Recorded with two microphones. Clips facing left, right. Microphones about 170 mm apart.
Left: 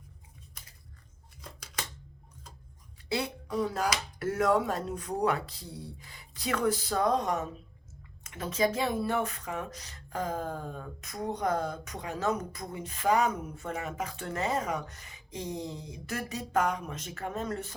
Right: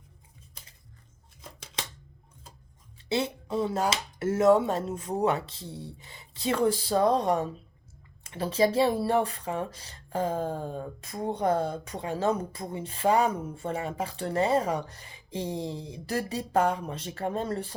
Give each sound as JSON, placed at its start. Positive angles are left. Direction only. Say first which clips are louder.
{"t": 1.4, "sound": "scissors", "louder": "right 1 dB", "side_deg": -25}
{"t": 3.1, "sound": "speech", "louder": "right 4 dB", "side_deg": -25}